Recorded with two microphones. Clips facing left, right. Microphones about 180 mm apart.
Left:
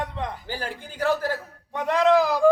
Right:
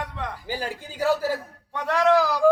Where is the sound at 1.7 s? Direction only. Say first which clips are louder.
Left 1 dB; 15° left (ahead or behind).